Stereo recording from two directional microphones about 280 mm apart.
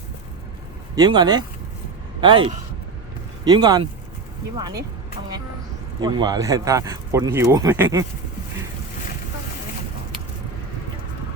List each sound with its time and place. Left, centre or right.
0.9 s speech: centre
6.0 s speech: centre